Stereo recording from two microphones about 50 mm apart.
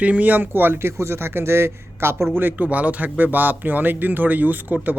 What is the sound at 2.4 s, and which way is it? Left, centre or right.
Speech, right.